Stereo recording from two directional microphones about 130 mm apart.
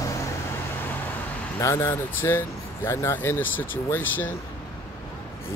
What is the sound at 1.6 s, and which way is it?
Speech, 20° left (ahead or behind).